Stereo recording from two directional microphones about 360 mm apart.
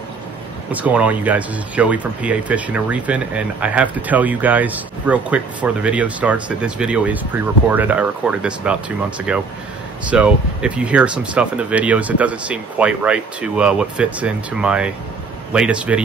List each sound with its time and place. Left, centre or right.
0.7 s speech: centre